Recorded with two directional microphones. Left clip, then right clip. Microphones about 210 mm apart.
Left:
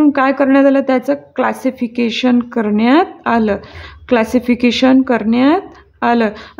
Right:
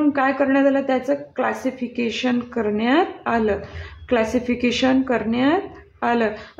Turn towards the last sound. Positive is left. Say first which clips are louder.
# left 6 dB
turn(degrees=30)  # may be behind; listen again after turning